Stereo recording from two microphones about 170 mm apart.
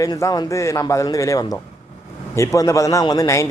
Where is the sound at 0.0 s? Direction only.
20° left (ahead or behind).